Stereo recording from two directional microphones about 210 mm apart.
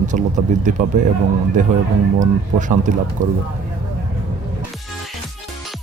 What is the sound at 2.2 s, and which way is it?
Speech, 35° right (ahead or behind).